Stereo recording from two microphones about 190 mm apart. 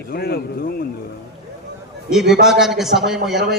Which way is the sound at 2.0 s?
Centre (ahead or behind).